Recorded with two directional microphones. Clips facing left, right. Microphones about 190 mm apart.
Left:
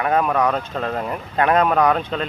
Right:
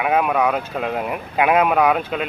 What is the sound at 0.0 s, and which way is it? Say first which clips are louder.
Speech: even; 10° right (ahead or behind).